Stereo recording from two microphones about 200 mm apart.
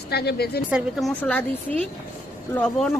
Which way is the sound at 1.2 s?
10° left (ahead or behind).